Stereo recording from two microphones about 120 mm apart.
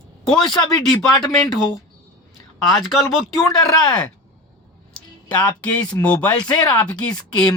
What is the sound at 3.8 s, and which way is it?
Speech, 35° left (ahead or behind).